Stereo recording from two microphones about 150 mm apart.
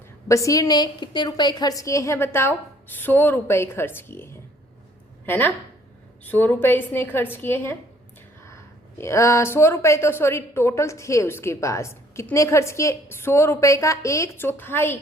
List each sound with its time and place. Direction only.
0.3 s a woman's voice: 20° left (ahead or behind)
9.0 s a woman's voice: 20° left (ahead or behind)